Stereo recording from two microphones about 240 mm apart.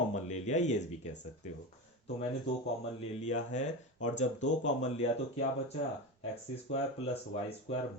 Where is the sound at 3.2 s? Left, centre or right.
Left.